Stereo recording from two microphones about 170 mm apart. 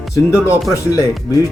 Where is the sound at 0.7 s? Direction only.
20° left (ahead or behind).